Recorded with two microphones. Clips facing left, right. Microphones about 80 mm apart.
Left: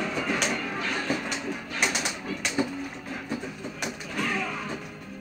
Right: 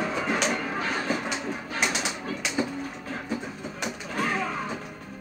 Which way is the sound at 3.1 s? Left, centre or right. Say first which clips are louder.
Right 1 dB; centre.